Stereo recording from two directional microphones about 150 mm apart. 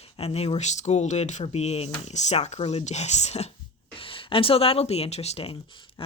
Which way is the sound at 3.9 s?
35° left (ahead or behind).